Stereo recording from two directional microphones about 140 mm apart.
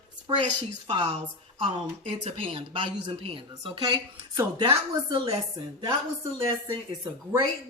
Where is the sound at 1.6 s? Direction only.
45° right (ahead or behind); by 5.2 s 30° right (ahead or behind).